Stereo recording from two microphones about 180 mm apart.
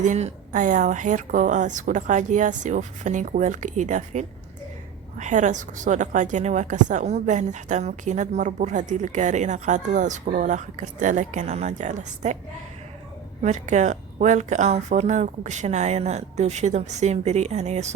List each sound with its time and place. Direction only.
0.0 s a woman's voice: 40° right (ahead or behind)
13.4 s speech: 40° right (ahead or behind)